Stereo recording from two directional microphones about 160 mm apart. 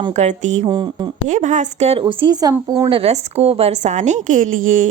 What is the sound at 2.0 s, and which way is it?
Speech, 30° right (ahead or behind).